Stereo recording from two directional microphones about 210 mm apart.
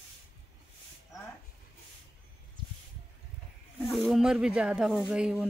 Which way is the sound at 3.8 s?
Centre (ahead or behind).